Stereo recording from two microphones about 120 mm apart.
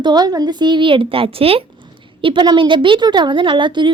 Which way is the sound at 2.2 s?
40° right (ahead or behind).